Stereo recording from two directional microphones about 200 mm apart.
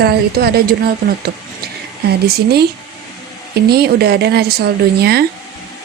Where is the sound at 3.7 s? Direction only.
50° right (ahead or behind).